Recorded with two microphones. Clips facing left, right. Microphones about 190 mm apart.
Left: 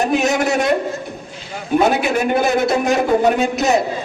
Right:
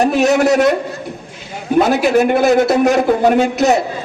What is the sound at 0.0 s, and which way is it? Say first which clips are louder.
Speech: right 5 dB; 75° right (ahead or behind).